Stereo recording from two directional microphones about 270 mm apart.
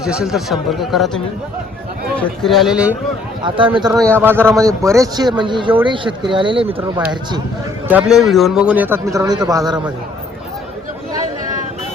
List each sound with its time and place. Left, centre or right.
0.0 s speech: centre
3.4 s speech: centre
3.7 s speech: centre
4.4 s speech: centre
7.9 s speech: centre